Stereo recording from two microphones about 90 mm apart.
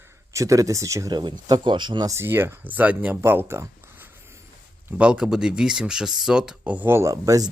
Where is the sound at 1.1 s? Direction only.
55° right (ahead or behind).